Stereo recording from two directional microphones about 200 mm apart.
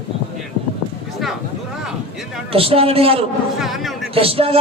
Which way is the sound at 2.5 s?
30° right (ahead or behind).